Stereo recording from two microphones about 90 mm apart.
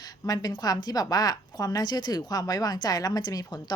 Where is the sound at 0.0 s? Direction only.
50° left (ahead or behind).